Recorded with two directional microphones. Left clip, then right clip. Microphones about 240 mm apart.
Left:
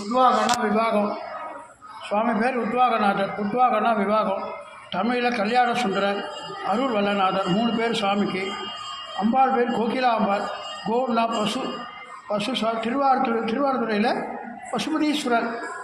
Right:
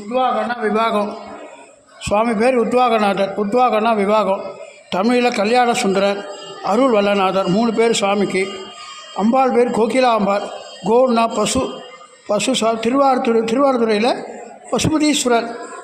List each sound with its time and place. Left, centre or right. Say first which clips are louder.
0.8 s a man's voice: right 8 dB; right
2.0 s a man's voice: right 7 dB; right